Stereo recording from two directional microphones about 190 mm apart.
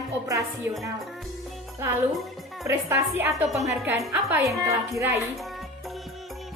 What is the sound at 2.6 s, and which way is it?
A woman's voice, 15° right (ahead or behind).